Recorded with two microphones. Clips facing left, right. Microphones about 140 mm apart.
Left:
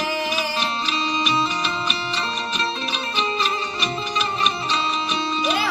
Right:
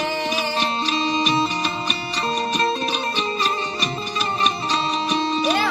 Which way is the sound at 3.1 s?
40° right (ahead or behind).